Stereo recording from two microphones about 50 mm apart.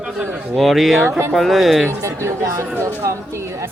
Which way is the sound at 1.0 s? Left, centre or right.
Right.